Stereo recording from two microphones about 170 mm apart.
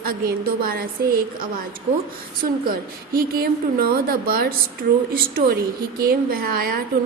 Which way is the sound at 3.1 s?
60° right (ahead or behind).